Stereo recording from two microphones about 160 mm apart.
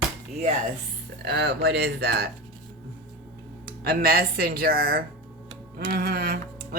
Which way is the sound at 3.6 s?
70° right (ahead or behind).